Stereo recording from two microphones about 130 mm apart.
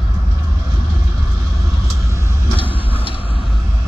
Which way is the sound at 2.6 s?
40° left (ahead or behind).